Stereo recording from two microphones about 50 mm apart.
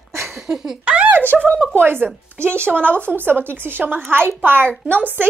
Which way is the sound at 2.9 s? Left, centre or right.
Left.